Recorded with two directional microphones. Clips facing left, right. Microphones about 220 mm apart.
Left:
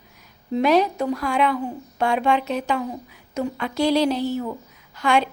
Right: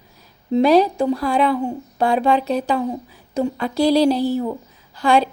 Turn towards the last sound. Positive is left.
turn(degrees=-35)  # may be behind; listen again after turning